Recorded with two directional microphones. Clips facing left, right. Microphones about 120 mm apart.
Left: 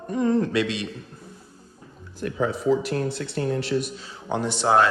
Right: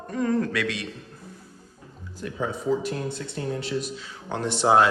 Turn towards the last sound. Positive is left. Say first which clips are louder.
# even
turn(degrees=-5)  # may be behind; listen again after turning